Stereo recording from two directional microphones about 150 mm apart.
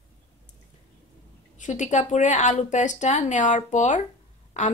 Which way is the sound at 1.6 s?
55° left (ahead or behind).